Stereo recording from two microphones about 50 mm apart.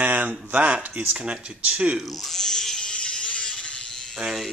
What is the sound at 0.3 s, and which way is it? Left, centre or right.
Speech, right.